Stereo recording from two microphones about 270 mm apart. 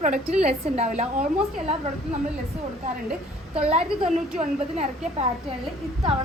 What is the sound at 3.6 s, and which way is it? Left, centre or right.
A woman's voice, right.